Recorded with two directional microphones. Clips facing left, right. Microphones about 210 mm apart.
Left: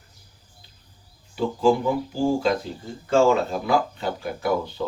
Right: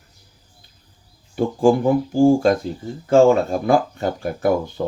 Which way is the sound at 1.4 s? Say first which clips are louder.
Right 4 dB; 50° right (ahead or behind).